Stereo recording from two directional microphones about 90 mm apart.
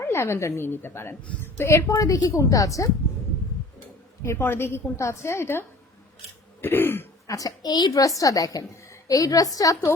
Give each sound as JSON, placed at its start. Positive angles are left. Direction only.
{"t": 0.0, "sound": "a woman's voice", "side_deg": 30}
{"t": 1.9, "sound": "a woman's voice", "side_deg": 40}
{"t": 4.2, "sound": "a woman's voice", "side_deg": 30}
{"t": 7.3, "sound": "a woman's voice", "side_deg": 40}